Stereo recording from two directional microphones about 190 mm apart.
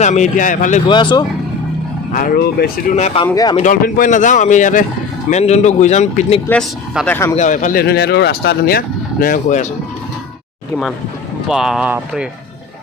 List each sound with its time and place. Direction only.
0.0 s a man's voice: 40° left (ahead or behind)
0.9 s speech: 25° left (ahead or behind)
2.1 s speech: 50° left (ahead or behind)
2.9 s a man's voice: 35° left (ahead or behind)
3.2 s speech: 20° left (ahead or behind)
3.6 s a man's voice: 45° left (ahead or behind)
6.5 s speech: 5° left (ahead or behind)
7.3 s speech: 40° left (ahead or behind)
9.2 s speech: 45° left (ahead or behind)
11.4 s speech: centre (ahead or behind)